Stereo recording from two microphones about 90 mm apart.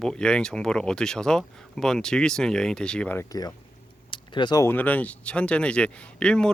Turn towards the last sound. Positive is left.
turn(degrees=10)  # may be behind; listen again after turning